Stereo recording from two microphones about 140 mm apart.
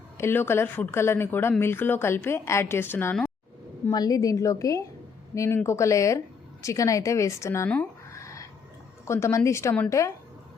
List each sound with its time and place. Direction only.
0.2 s speech: 15° left (ahead or behind)
3.9 s a woman's voice: 25° left (ahead or behind)